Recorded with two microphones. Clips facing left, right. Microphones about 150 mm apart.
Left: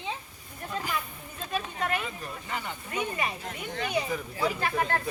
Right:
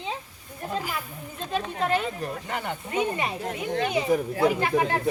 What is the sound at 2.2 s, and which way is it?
Speech, 60° right (ahead or behind).